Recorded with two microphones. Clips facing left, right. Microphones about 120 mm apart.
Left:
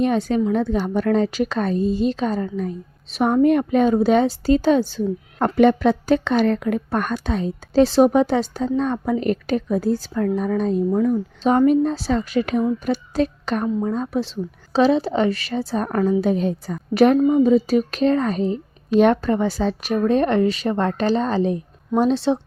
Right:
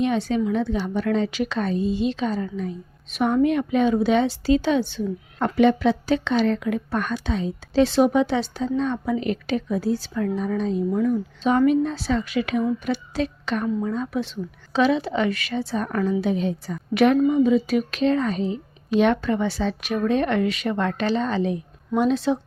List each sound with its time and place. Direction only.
0.0 s a woman's voice: 45° left (ahead or behind)
10.9 s a woman's voice: 35° left (ahead or behind)